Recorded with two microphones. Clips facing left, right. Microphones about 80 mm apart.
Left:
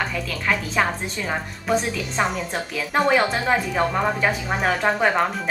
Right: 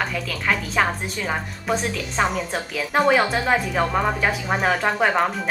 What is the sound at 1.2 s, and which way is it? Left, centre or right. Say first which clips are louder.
A woman's voice: right 1 dB; centre.